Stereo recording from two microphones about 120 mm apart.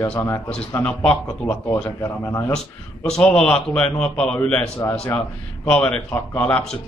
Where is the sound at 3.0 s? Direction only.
5° left (ahead or behind).